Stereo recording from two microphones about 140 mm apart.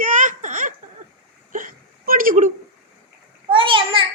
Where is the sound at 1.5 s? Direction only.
80° right.